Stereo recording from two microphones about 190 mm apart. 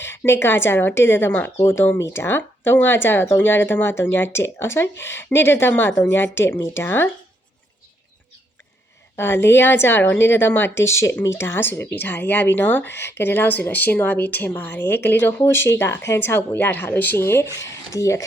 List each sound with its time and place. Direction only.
0.0 s speech: 10° left (ahead or behind)
9.1 s speech: 10° left (ahead or behind)